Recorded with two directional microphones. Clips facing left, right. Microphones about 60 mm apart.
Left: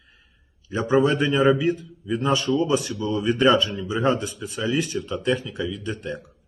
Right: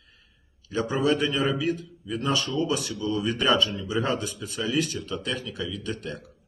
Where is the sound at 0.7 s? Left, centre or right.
Left.